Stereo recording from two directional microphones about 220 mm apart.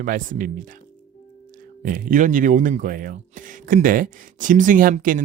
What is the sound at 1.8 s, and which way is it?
Speech, 40° right (ahead or behind).